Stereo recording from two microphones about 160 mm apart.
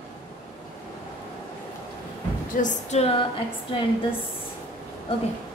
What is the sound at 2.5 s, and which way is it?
Speech, 50° left (ahead or behind).